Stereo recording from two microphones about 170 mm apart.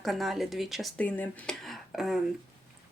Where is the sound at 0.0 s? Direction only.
Centre (ahead or behind).